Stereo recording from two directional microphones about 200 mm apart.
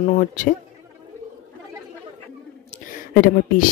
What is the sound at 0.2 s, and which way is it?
Speech, 40° left (ahead or behind).